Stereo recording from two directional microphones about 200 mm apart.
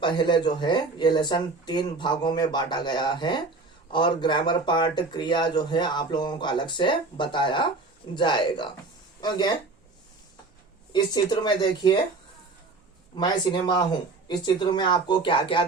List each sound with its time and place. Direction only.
0.0 s speech: 25° left (ahead or behind)
10.9 s speech: 20° left (ahead or behind)
13.1 s speech: 20° left (ahead or behind)